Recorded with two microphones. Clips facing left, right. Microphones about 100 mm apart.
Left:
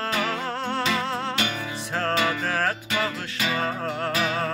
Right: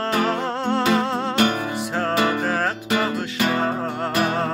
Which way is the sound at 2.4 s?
15° right (ahead or behind).